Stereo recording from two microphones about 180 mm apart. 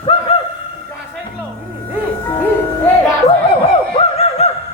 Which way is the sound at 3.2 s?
30° left (ahead or behind).